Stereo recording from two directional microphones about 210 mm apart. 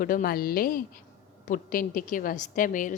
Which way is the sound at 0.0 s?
40° left (ahead or behind).